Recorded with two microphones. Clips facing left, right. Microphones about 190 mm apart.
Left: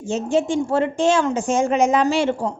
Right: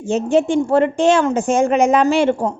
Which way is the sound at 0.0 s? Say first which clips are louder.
Right 4 dB; 60° right (ahead or behind).